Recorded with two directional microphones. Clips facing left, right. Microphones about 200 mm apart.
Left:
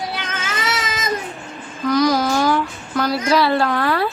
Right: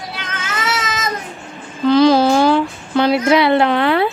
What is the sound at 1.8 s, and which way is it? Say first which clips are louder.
Speech: right 6 dB; 30° right (ahead or behind).